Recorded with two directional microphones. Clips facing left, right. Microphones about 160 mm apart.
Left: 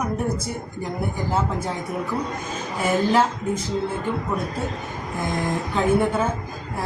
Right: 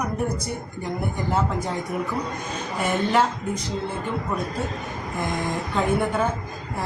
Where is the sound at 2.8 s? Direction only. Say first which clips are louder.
Left 2 dB; 5° left (ahead or behind).